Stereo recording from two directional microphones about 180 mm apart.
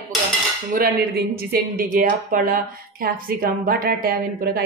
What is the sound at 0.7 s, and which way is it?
A woman's voice, 60° right (ahead or behind).